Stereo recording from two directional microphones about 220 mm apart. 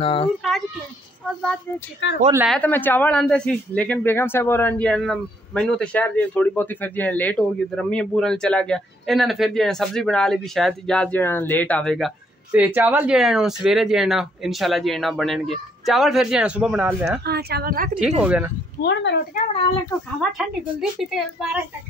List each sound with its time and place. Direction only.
0.0 s a child's voice: 25° left (ahead or behind)
0.4 s children playing: centre (ahead or behind)
1.2 s speech: 5° left (ahead or behind)
12.5 s speech: 5° right (ahead or behind)
17.2 s a woman's voice: 45° right (ahead or behind)
18.2 s speech: 5° right (ahead or behind)
18.8 s speech: 50° left (ahead or behind)
21.0 s speech: centre (ahead or behind)